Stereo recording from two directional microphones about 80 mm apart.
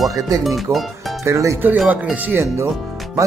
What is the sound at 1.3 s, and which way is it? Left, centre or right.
Speech, right.